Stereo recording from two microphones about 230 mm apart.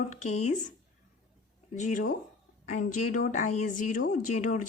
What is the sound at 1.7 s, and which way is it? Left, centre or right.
Speech, left.